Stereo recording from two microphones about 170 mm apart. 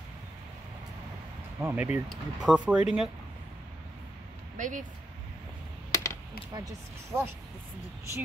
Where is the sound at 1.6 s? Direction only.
10° right (ahead or behind).